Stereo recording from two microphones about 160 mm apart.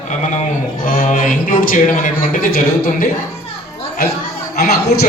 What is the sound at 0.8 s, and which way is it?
A man's voice, 55° left (ahead or behind).